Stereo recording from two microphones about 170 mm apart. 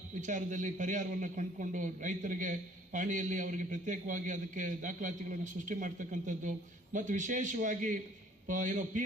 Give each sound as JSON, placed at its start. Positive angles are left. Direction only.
{"t": 0.2, "sound": "a man's voice", "side_deg": -50}